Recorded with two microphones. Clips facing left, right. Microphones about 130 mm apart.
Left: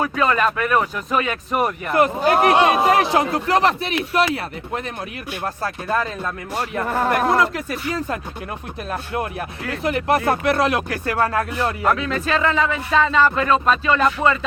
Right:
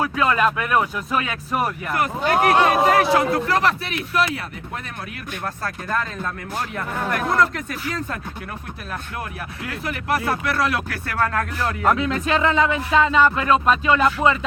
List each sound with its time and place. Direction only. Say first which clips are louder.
0.0 s speech: left 1 dB; 5° right (ahead or behind)
1.6 s a man's voice: left 8 dB; 25° left (ahead or behind)
5.6 s speech: left 3 dB; 15° left (ahead or behind)
6.8 s speech: left 6 dB; 65° left (ahead or behind)
7.9 s a man's voice: left 4 dB; 20° left (ahead or behind)
9.8 s a man's voice: left 5 dB; 25° left (ahead or behind)
11.9 s speech: right 3 dB; 20° right (ahead or behind)